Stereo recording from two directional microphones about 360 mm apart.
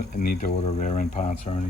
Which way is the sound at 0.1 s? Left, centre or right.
Left.